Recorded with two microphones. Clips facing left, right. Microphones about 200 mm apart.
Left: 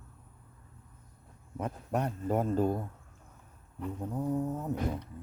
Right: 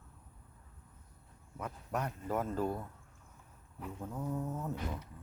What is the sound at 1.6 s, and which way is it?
Speech, 30° left (ahead or behind).